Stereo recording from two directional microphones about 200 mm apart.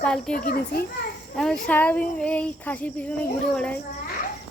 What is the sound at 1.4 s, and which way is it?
Speech, 5° left (ahead or behind).